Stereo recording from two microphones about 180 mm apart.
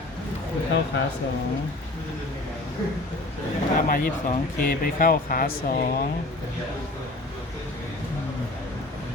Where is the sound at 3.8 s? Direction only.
50° left (ahead or behind).